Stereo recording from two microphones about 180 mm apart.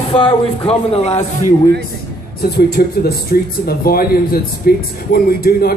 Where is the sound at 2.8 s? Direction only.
60° left (ahead or behind).